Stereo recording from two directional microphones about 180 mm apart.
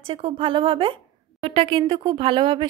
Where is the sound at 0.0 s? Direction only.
30° right (ahead or behind).